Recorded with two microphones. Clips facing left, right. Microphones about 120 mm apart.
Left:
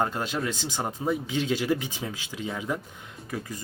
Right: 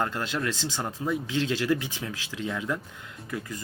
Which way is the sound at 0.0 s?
15° left (ahead or behind).